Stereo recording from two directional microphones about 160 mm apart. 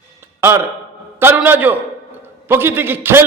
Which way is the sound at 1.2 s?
15° right (ahead or behind).